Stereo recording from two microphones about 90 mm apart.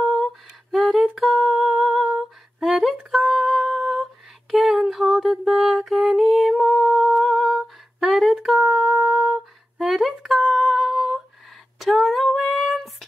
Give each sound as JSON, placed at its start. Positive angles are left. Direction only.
{"t": 0.0, "sound": "humming", "side_deg": 0}
{"t": 6.3, "sound": "music", "side_deg": -15}
{"t": 6.6, "sound": "humming", "side_deg": -5}
{"t": 7.2, "sound": "a sound", "side_deg": 0}
{"t": 11.8, "sound": "female singing", "side_deg": 0}